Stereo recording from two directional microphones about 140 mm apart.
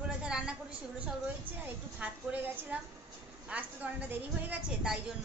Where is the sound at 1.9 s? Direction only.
10° right (ahead or behind).